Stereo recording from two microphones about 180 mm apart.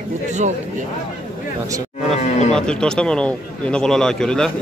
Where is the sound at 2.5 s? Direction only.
5° left (ahead or behind).